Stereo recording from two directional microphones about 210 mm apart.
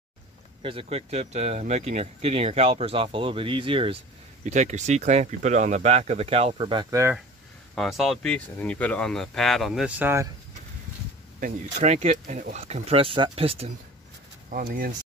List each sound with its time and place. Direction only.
0.6 s speech: 25° right (ahead or behind)
7.7 s speech: centre (ahead or behind)
11.3 s speech: 35° right (ahead or behind)
14.5 s speech: 40° right (ahead or behind)